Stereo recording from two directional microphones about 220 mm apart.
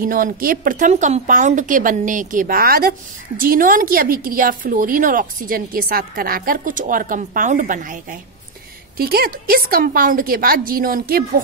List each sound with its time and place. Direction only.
0.0 s speech: 40° right (ahead or behind)